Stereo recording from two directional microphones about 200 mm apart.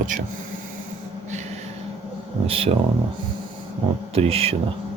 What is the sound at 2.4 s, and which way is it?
Speech, 30° right (ahead or behind).